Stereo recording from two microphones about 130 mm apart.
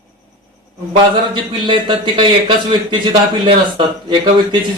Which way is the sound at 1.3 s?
40° right (ahead or behind).